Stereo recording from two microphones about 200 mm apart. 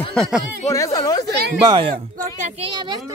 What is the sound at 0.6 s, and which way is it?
Speech, 15° left (ahead or behind).